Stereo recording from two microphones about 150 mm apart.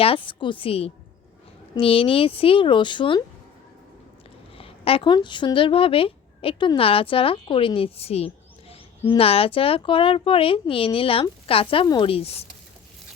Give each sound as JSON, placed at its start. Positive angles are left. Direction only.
{"t": 0.0, "sound": "speech", "side_deg": 35}
{"t": 4.5, "sound": "speech", "side_deg": 40}